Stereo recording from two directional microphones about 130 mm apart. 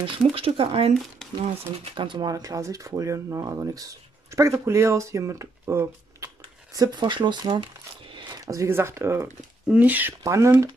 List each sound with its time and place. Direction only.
0.0 s speech: 45° right (ahead or behind)
1.2 s a sound: centre (ahead or behind)
2.0 s speech: 35° right (ahead or behind)
8.1 s a sound: 40° right (ahead or behind)
8.5 s speech: 20° right (ahead or behind)
10.2 s speech: 25° right (ahead or behind)